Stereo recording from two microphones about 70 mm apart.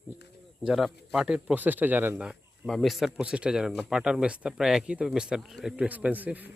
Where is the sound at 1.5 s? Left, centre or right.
Right.